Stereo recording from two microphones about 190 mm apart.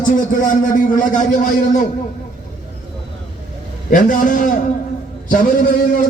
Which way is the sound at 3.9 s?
45° left (ahead or behind).